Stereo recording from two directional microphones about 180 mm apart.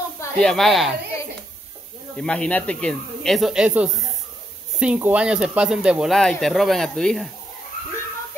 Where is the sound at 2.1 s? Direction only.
5° left (ahead or behind).